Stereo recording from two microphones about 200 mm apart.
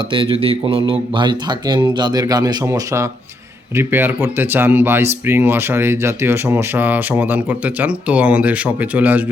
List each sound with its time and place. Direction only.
0.1 s speech: 25° right (ahead or behind); by 9.2 s 10° right (ahead or behind)